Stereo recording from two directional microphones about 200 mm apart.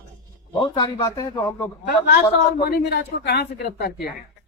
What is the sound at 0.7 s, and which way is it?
Speech, 20° left (ahead or behind).